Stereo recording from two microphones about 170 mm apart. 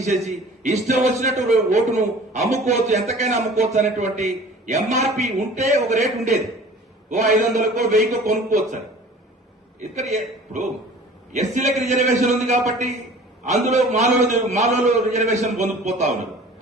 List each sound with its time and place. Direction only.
0.0 s a man's voice: 40° right (ahead or behind)
7.1 s a man's voice: 45° right (ahead or behind)
9.8 s a man's voice: 40° right (ahead or behind)